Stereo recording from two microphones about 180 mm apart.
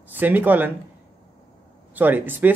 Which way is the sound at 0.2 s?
10° right (ahead or behind).